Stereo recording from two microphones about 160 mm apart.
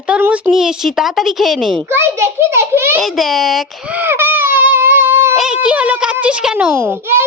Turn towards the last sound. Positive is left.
turn(degrees=-15)  # may be behind; listen again after turning